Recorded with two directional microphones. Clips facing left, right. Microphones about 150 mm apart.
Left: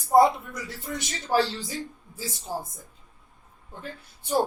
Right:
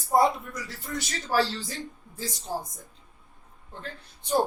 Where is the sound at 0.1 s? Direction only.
10° left (ahead or behind).